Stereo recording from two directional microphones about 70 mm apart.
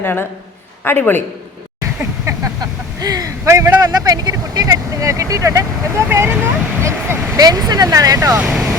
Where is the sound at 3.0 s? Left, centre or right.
Right.